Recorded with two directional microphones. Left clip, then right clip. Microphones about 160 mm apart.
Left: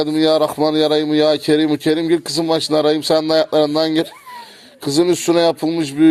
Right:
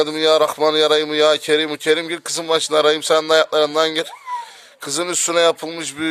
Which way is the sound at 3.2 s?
45° right (ahead or behind).